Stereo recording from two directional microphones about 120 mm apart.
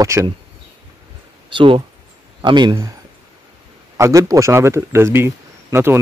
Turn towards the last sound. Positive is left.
turn(degrees=-20)  # may be behind; listen again after turning